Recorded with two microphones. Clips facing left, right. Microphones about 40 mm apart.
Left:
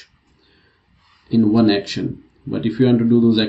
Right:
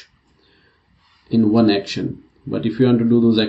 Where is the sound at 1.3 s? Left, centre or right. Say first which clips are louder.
Even; centre.